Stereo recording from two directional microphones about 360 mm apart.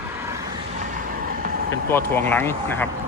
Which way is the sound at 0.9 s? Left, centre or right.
Right.